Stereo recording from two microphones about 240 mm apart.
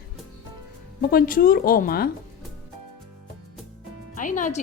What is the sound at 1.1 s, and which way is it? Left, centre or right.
Speech, left.